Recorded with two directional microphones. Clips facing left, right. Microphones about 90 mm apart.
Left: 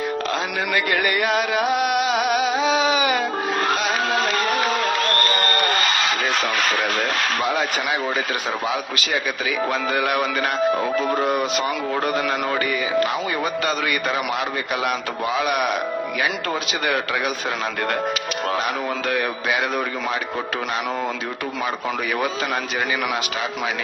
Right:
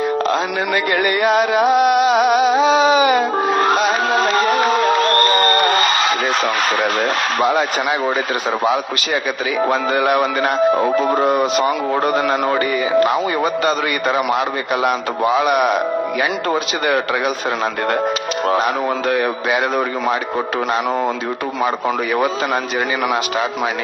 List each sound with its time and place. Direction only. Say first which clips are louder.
1.2 s a sound: right 6 dB; 30° right (ahead or behind)
6.3 s a man's voice: right 4 dB; 35° right (ahead or behind)
9.6 s a man's voice: right 6 dB; 40° right (ahead or behind)
18.4 s a man's voice: right 7 dB; 35° right (ahead or behind)
21.6 s a man's voice: right 7 dB; 35° right (ahead or behind)